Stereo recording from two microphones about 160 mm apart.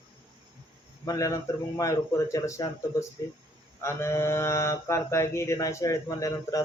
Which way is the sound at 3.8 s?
15° left (ahead or behind).